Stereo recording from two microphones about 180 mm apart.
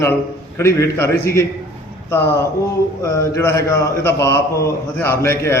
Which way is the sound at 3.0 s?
15° left (ahead or behind).